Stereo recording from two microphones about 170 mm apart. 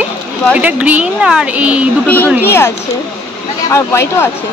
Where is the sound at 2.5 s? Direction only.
15° left (ahead or behind).